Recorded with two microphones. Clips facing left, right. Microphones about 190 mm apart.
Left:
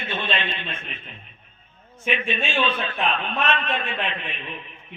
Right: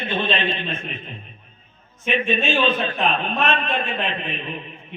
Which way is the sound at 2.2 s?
35° right (ahead or behind).